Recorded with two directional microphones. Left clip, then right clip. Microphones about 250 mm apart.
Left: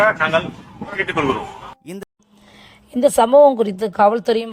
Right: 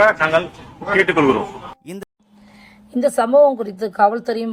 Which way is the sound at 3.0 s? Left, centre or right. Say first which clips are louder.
Left 2 dB; left.